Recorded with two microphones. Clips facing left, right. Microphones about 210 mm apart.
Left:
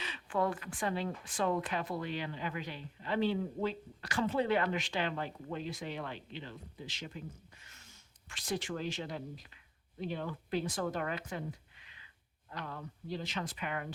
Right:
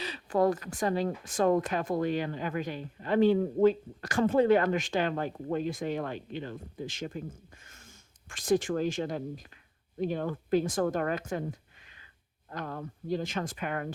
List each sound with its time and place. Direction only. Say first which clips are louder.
0.0 s a woman's voice: right 7 dB; 40° right (ahead or behind)